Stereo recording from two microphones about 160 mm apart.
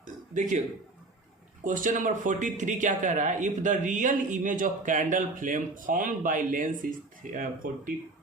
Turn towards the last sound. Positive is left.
turn(degrees=-60)  # may be behind; listen again after turning